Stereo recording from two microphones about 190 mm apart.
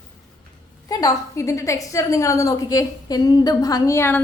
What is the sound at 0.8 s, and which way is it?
A woman's voice, 15° left (ahead or behind).